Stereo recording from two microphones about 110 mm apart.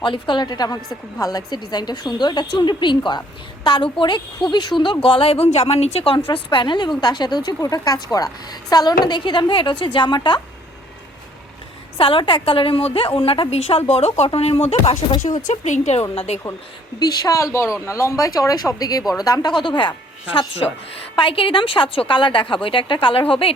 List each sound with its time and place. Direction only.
0.0 s a woman's voice: 45° left (ahead or behind)
5.0 s speech: 55° left (ahead or behind)
6.2 s a woman's voice: 50° left (ahead or behind)
11.9 s a woman's voice: 55° left (ahead or behind)
13.5 s a woman's voice: 65° left (ahead or behind)
15.2 s speech: 90° left
16.1 s speech: 75° left (ahead or behind)
17.0 s a woman's voice: 30° left (ahead or behind)
21.2 s a woman's voice: 50° left (ahead or behind)